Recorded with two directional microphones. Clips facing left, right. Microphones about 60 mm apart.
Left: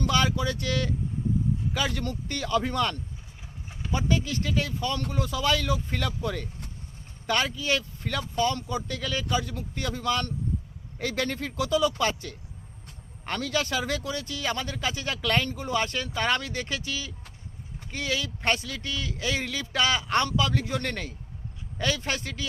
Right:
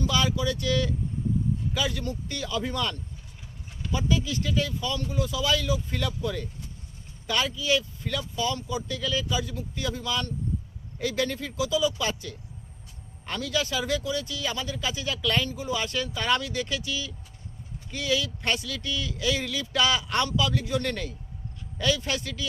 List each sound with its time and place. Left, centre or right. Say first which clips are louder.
0.0 s speech: left 1 dB; left